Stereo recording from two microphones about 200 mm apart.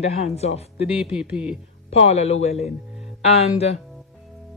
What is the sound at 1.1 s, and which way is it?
Speech, 5° right (ahead or behind).